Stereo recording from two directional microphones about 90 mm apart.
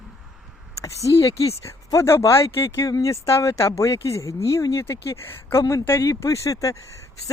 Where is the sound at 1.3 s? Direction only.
90° left.